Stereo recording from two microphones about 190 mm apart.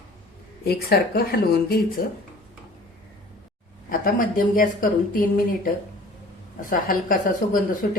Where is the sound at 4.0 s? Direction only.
45° left (ahead or behind).